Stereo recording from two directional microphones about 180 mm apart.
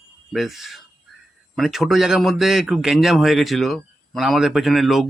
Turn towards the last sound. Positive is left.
turn(degrees=0)  # may be behind; listen again after turning